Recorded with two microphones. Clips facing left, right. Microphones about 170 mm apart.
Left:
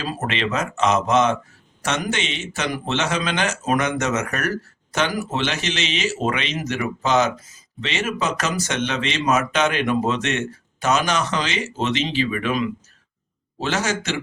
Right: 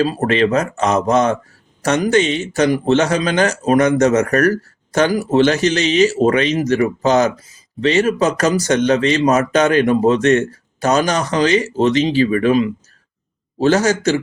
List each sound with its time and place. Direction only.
0.1 s a man's voice: 40° right (ahead or behind)